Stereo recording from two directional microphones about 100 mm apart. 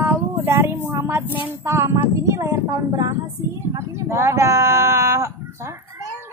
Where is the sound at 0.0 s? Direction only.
25° right (ahead or behind).